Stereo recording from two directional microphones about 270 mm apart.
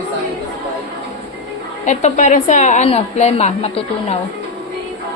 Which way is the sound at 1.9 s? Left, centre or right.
Left.